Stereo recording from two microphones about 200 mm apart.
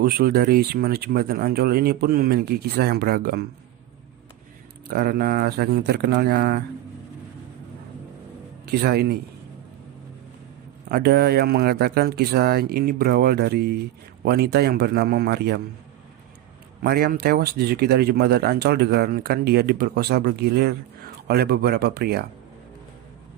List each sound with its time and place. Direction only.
0.0 s speech: 50° right (ahead or behind)
4.9 s speech: 50° right (ahead or behind)
8.6 s speech: 50° right (ahead or behind)
10.8 s speech: 50° right (ahead or behind)
16.8 s speech: 50° right (ahead or behind)